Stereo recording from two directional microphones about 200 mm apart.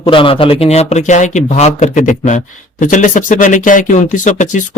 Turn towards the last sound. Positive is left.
turn(degrees=40)  # may be behind; listen again after turning